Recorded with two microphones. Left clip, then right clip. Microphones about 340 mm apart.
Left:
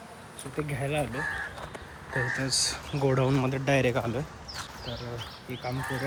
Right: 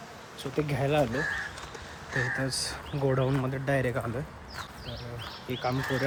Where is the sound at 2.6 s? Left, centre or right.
Centre.